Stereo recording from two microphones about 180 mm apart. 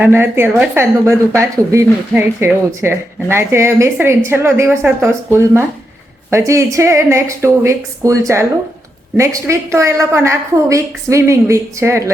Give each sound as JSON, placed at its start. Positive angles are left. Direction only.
{"t": 0.0, "sound": "speech", "side_deg": -10}